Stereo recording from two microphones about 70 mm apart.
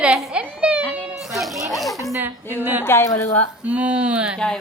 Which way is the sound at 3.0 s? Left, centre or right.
Left.